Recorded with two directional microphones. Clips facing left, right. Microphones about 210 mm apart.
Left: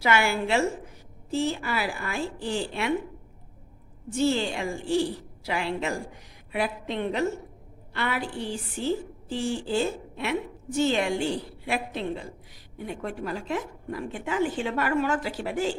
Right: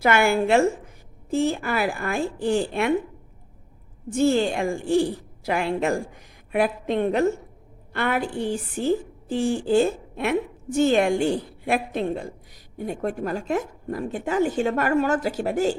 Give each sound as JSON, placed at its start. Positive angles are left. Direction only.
{"t": 0.0, "sound": "a woman's voice", "side_deg": -50}
{"t": 4.1, "sound": "a woman's voice", "side_deg": -50}